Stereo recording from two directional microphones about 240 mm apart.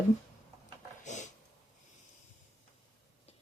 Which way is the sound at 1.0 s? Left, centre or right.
Left.